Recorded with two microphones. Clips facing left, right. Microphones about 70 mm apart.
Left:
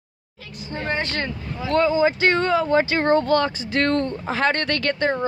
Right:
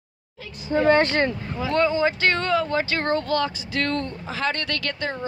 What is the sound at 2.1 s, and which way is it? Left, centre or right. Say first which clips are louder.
Speech: left 3 dB; centre.